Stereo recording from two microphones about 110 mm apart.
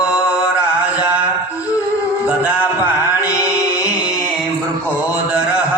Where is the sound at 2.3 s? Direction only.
15° right (ahead or behind).